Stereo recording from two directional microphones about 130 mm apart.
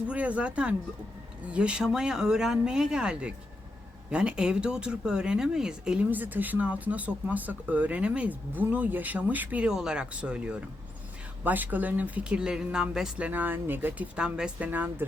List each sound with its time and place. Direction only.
0.1 s speech: 10° right (ahead or behind)